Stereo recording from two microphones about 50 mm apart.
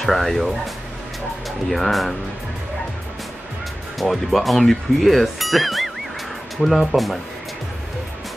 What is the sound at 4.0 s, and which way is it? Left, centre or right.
Speech, centre.